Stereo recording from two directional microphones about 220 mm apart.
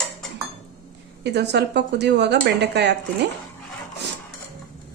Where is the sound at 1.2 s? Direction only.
50° right (ahead or behind).